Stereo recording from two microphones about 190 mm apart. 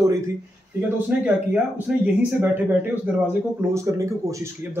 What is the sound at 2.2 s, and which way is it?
Speech, 10° right (ahead or behind).